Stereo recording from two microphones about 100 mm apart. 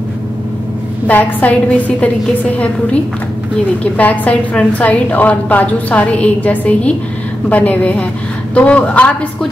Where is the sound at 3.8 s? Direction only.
15° left (ahead or behind).